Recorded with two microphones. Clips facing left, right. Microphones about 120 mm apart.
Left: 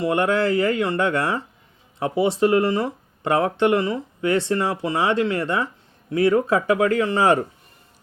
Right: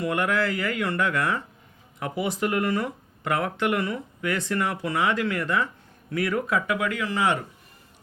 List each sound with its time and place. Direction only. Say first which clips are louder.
0.0 s speech: left 5 dB; 30° left (ahead or behind)